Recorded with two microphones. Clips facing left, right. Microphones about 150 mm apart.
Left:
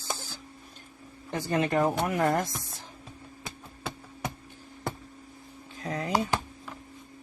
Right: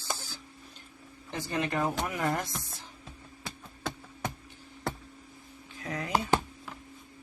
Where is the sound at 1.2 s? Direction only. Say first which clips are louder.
Left 5 dB; 50° left (ahead or behind).